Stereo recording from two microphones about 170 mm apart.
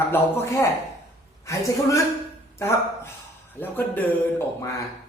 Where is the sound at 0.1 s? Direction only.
15° left (ahead or behind).